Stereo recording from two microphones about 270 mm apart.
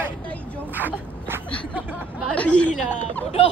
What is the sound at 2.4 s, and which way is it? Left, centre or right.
Speech, centre.